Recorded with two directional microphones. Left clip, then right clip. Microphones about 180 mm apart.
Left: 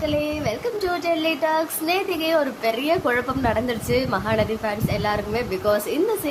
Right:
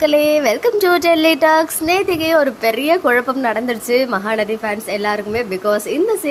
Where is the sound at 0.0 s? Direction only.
45° right (ahead or behind).